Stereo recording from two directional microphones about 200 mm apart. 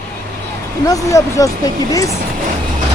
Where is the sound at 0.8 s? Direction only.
15° left (ahead or behind).